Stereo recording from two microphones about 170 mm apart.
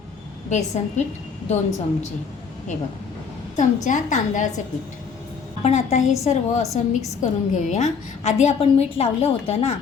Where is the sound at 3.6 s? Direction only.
45° left (ahead or behind).